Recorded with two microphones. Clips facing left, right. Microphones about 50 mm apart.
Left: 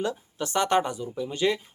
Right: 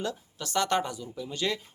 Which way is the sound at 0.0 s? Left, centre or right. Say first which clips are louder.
Left 5 dB; left.